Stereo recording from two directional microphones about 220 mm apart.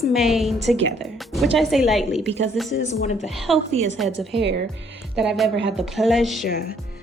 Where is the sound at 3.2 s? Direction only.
Centre (ahead or behind).